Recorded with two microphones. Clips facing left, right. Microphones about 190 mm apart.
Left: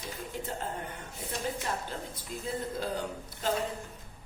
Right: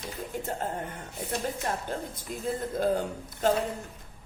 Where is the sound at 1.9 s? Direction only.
50° right (ahead or behind).